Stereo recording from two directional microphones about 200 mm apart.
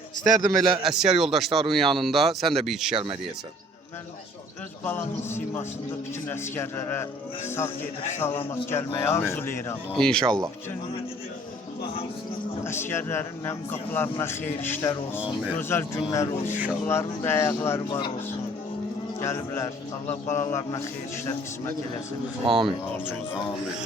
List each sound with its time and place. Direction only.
0.3 s speech: centre (ahead or behind)
0.6 s speech: 20° right (ahead or behind)
0.9 s speech: 5° right (ahead or behind)
2.9 s speech: 25° right (ahead or behind)
4.9 s speech: 10° left (ahead or behind)
12.6 s speech: 10° left (ahead or behind)
19.2 s speech: 15° left (ahead or behind)
22.4 s speech: 25° right (ahead or behind)